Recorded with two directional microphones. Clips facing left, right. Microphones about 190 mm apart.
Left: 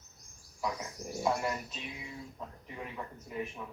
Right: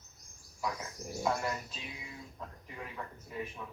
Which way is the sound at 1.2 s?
10° left (ahead or behind).